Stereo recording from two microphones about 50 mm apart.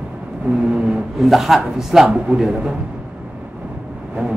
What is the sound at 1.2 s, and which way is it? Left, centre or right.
Speech, centre.